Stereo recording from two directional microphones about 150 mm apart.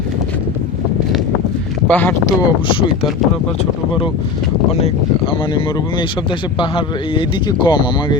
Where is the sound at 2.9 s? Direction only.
Centre (ahead or behind).